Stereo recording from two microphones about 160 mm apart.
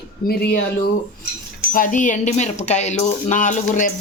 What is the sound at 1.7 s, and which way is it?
Speech, 55° left (ahead or behind).